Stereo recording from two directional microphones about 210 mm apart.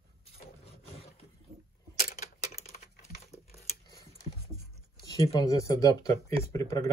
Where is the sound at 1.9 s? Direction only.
35° left (ahead or behind).